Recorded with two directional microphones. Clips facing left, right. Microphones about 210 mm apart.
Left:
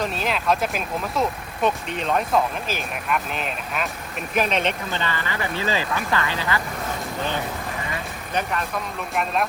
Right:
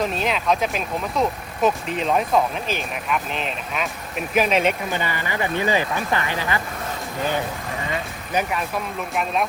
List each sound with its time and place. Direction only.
0.0 s speech: centre (ahead or behind)
5.4 s speech: 20° right (ahead or behind)
8.3 s speech: 10° right (ahead or behind)